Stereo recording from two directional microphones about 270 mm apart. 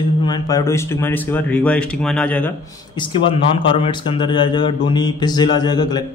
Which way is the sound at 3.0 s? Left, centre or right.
Centre.